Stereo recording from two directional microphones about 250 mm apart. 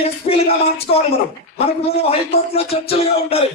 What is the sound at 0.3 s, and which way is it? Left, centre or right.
Speech, left.